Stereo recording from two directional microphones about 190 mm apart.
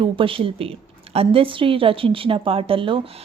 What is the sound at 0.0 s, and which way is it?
A woman's voice, 25° right (ahead or behind).